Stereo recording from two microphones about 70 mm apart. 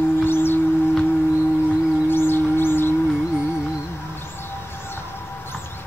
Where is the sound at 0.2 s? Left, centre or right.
Left.